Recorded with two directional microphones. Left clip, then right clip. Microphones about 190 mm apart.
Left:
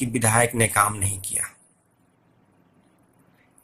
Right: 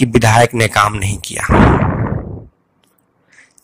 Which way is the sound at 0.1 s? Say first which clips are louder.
Right 9 dB; 45° right (ahead or behind).